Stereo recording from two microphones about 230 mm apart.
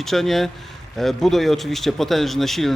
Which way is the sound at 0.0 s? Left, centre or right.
Centre.